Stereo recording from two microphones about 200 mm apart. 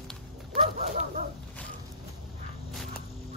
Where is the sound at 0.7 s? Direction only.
35° right (ahead or behind).